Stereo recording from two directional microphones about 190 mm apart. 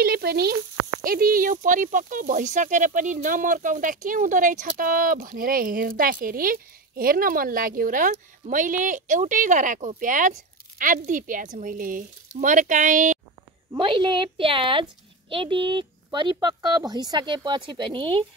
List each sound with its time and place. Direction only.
0.0 s speech: 55° right (ahead or behind)
13.7 s a woman's voice: 25° right (ahead or behind)